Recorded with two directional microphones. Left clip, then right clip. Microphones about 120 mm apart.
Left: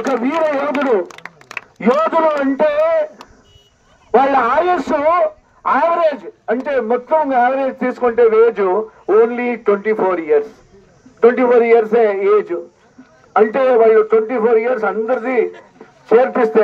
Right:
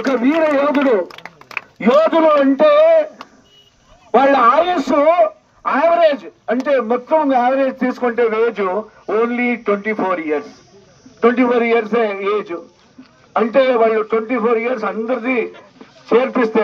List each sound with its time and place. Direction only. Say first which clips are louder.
0.0 s a man's voice: right 1 dB; 25° left (ahead or behind)
1.2 s a sound: left 1 dB; 5° right (ahead or behind)
1.8 s a man's voice: right 2 dB; 30° left (ahead or behind)
2.2 s child singing: right 3 dB; 40° left (ahead or behind)
4.1 s a man's voice: right 1 dB; 30° left (ahead or behind)